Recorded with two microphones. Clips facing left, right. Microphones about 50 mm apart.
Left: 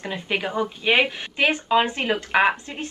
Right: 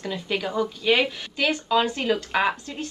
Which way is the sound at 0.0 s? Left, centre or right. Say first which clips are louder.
Left 1 dB; left.